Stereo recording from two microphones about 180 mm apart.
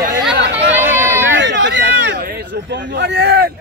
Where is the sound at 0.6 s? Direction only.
10° right (ahead or behind).